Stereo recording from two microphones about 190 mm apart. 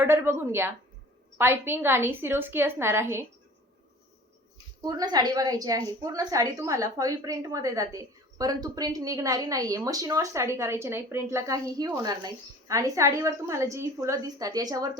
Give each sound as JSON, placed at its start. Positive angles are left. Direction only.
{"t": 0.0, "sound": "a woman's voice", "side_deg": -10}
{"t": 4.8, "sound": "a woman's voice", "side_deg": -20}